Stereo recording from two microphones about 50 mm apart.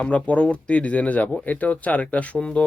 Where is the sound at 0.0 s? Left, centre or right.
Left.